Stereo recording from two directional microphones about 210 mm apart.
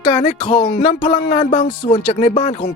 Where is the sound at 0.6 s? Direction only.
45° left (ahead or behind).